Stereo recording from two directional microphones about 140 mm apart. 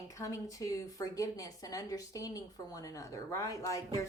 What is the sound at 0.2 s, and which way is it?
A woman's voice, 25° left (ahead or behind).